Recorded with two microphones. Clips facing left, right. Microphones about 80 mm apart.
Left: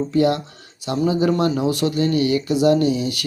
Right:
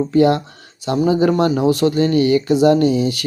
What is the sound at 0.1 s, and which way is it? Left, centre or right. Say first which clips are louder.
Speech: right 4 dB; right.